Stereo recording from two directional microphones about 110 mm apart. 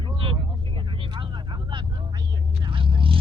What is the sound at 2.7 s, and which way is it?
Vehicle, 50° right (ahead or behind).